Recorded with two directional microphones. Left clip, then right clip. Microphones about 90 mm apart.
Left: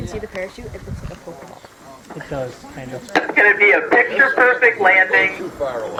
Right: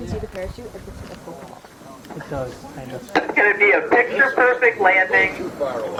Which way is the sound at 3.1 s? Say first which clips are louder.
Left 3 dB; 20° left (ahead or behind).